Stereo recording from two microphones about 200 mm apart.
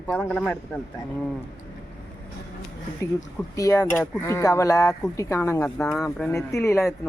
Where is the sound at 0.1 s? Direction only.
5° left (ahead or behind).